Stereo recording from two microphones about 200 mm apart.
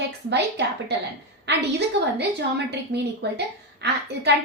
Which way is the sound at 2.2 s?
55° right (ahead or behind).